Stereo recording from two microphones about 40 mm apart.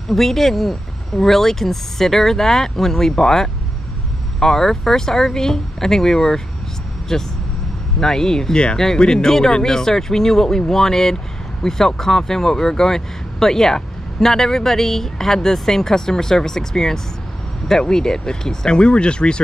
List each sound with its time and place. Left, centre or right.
0.1 s speech: centre; by 19.4 s left